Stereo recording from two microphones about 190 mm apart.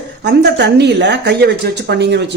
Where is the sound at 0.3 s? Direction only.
65° right (ahead or behind).